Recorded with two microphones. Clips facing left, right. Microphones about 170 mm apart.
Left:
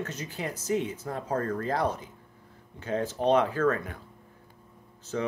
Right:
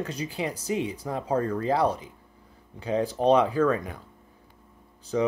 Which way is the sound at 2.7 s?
15° right (ahead or behind).